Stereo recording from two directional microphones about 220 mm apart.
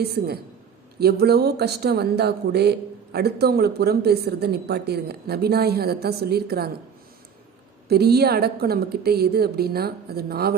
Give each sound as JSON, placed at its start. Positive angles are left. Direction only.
{"t": 0.0, "sound": "speech", "side_deg": -45}
{"t": 7.9, "sound": "speech", "side_deg": -45}